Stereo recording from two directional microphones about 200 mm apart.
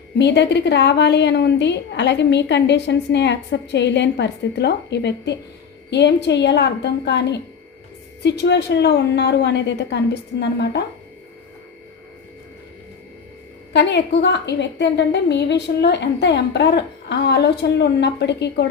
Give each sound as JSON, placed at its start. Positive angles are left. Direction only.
{"t": 0.2, "sound": "a woman's voice", "side_deg": 60}
{"t": 13.7, "sound": "a woman's voice", "side_deg": 60}